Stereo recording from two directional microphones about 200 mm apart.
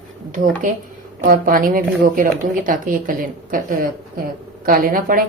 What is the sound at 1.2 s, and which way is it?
A woman's voice, 45° right (ahead or behind).